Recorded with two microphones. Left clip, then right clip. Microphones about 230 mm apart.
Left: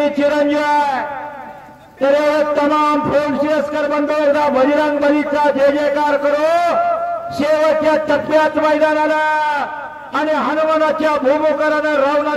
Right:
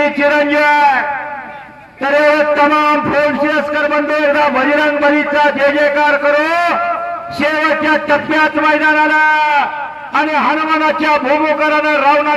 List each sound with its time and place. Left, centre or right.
0.0 s a man's voice: left
2.0 s a man's voice: left